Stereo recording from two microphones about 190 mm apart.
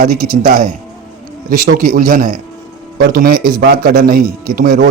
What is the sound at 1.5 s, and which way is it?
Speech, 50° right (ahead or behind).